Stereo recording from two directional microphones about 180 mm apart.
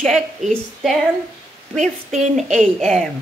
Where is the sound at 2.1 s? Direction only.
40° right (ahead or behind).